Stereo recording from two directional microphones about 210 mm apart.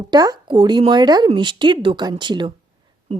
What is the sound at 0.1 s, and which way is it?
Speech, 20° right (ahead or behind).